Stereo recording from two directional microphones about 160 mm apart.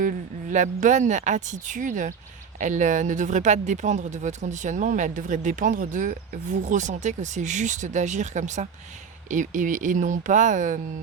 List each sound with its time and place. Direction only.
0.0 s speech: 55° right (ahead or behind)